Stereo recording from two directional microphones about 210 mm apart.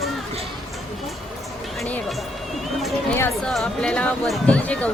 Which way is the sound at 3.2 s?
5° left (ahead or behind).